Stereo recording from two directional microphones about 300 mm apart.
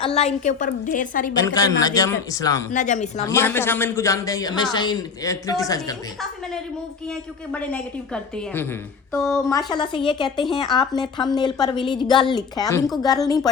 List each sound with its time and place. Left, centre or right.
0.0 s a woman's voice: left
1.5 s speech: centre
2.7 s a woman's voice: left
3.2 s speech: centre
7.5 s a woman's voice: centre